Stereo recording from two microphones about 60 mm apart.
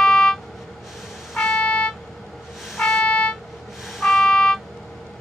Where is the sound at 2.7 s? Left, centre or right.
Centre.